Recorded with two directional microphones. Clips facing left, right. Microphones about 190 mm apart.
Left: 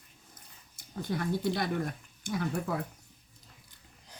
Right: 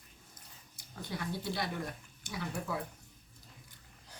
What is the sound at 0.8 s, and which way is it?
Speech, 50° left (ahead or behind).